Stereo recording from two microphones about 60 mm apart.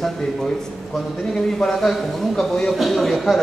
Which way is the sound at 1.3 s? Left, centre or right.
Centre.